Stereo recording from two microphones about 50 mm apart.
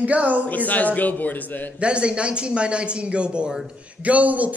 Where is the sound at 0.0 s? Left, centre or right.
Right.